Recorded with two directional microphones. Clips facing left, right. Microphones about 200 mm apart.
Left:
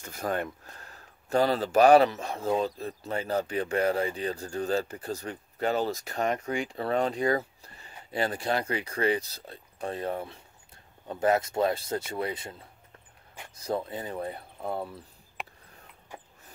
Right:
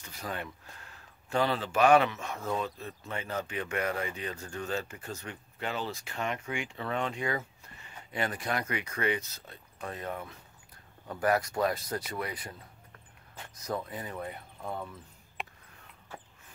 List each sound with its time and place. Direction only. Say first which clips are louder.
0.0 s speech: left 8 dB; 50° left (ahead or behind); by 12.5 s 25° left (ahead or behind)
13.6 s speech: left 4 dB; 30° left (ahead or behind)
16.1 s a sound: left 1 dB; 15° left (ahead or behind)